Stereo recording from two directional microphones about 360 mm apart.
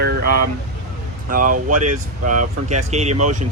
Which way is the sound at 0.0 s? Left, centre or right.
Right.